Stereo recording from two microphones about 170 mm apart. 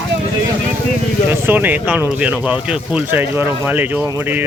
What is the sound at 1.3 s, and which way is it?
Speech, 10° right (ahead or behind).